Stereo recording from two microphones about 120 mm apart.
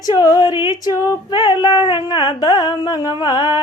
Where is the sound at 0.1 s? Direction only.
35° left (ahead or behind).